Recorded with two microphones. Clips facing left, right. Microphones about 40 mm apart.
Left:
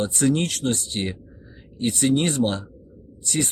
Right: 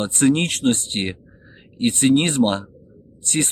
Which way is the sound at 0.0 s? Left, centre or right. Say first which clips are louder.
Right 3 dB; right.